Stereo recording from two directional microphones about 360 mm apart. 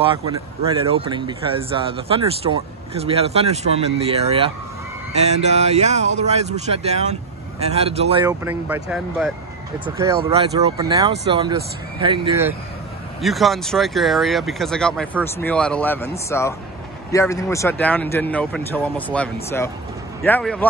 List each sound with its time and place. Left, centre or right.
0.8 s speech: centre